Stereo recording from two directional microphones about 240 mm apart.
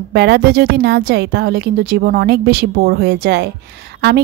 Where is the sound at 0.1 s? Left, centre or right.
Right.